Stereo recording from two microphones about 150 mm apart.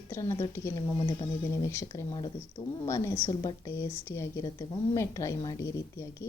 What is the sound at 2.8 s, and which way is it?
A woman's voice, 20° left (ahead or behind).